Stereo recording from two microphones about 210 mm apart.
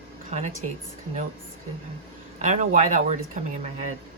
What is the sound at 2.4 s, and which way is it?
Speech, 35° right (ahead or behind).